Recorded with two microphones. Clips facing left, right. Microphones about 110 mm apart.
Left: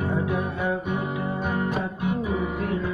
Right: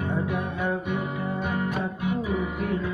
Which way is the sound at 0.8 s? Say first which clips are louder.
Left 1 dB; 40° left (ahead or behind).